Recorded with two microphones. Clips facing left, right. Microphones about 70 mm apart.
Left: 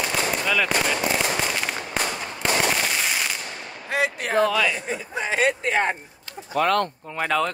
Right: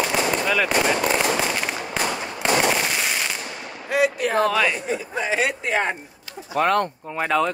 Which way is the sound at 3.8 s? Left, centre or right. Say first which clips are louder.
Right 4 dB; left.